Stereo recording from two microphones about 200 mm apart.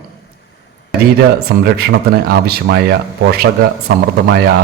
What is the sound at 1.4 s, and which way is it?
A man's voice, 55° right (ahead or behind).